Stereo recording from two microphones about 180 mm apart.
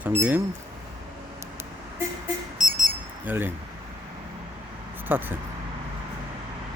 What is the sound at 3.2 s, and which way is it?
Speech, 10° right (ahead or behind).